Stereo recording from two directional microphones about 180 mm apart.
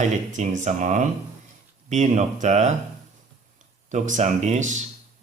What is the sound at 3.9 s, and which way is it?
Speech, 45° right (ahead or behind).